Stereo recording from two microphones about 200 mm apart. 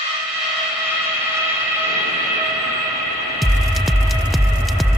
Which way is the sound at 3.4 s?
Centre (ahead or behind).